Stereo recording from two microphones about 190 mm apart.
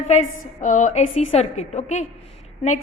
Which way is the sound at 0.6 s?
40° left (ahead or behind).